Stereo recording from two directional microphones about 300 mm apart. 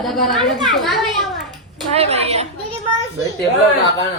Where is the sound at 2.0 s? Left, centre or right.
Right.